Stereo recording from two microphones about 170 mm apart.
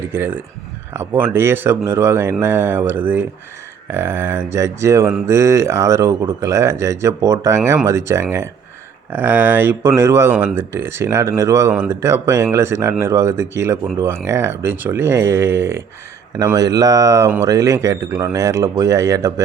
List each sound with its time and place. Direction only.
0.1 s speech: 15° right (ahead or behind)